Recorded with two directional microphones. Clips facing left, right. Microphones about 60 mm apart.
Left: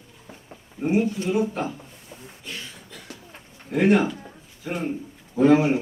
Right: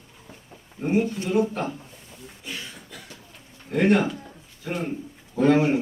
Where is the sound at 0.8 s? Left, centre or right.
Centre.